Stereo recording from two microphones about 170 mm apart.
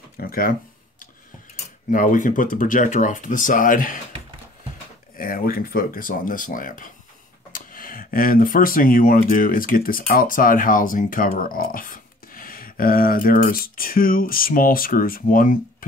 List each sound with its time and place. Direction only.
0.2 s speech: 60° left (ahead or behind)
5.1 s speech: 55° left (ahead or behind)